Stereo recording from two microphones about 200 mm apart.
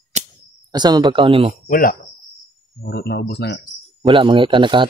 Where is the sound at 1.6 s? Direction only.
45° left (ahead or behind).